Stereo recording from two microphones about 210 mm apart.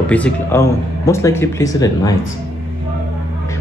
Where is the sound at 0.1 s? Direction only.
10° left (ahead or behind).